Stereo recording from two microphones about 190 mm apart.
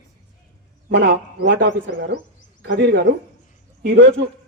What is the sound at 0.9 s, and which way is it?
A man's voice, 65° right (ahead or behind).